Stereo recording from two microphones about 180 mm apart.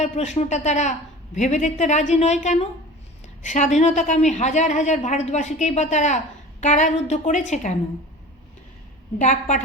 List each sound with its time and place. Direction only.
0.0 s a woman's voice: 40° left (ahead or behind)
9.1 s a woman's voice: 40° left (ahead or behind)